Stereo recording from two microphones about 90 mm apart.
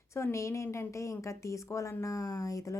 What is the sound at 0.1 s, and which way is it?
A woman's voice, 30° left (ahead or behind).